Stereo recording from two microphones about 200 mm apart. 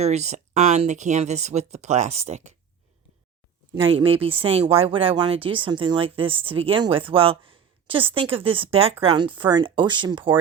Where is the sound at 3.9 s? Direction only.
30° right (ahead or behind).